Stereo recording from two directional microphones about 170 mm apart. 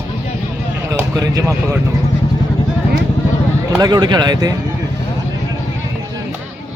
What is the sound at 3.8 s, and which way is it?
Speech, 25° right (ahead or behind).